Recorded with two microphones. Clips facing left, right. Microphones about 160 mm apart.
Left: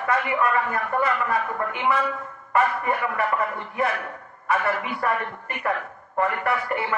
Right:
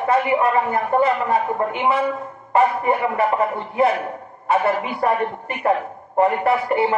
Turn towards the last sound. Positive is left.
turn(degrees=-25)  # may be behind; listen again after turning